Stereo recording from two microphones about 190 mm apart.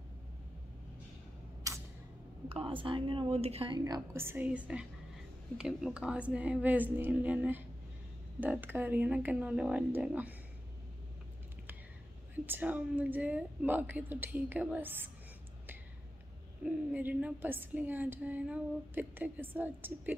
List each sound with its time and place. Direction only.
1.6 s a sound: 15° right (ahead or behind)
2.5 s a woman's voice: 25° right (ahead or behind); by 10.3 s 10° right (ahead or behind)
12.4 s a woman's voice: 10° right (ahead or behind)
16.6 s a woman's voice: 10° right (ahead or behind)